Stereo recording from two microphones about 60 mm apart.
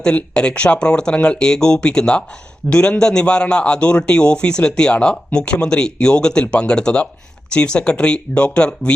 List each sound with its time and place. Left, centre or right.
0.0 s a man's voice: centre